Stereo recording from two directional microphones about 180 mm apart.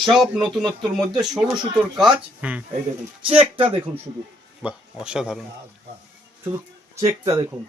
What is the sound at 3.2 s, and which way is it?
Speech, 30° right (ahead or behind).